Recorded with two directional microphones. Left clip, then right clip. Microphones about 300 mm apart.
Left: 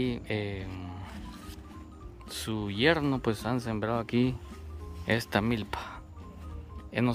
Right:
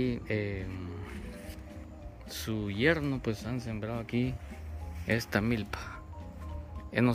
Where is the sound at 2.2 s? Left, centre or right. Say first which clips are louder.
Left 2 dB; centre.